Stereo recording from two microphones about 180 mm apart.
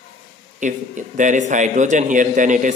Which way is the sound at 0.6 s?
45° right (ahead or behind).